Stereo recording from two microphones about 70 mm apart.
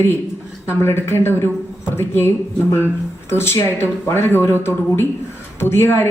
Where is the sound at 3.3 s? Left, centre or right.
Left.